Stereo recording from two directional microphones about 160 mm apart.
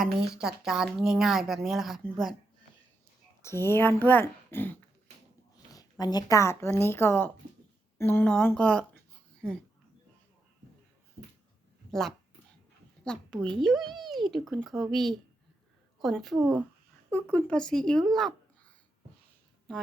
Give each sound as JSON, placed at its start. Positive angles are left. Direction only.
{"t": 0.0, "sound": "speech", "side_deg": -5}
{"t": 3.4, "sound": "speech", "side_deg": 15}
{"t": 5.5, "sound": "a woman's voice", "side_deg": 25}
{"t": 11.9, "sound": "a woman's voice", "side_deg": 0}
{"t": 17.1, "sound": "speech", "side_deg": 10}
{"t": 19.7, "sound": "speech", "side_deg": 5}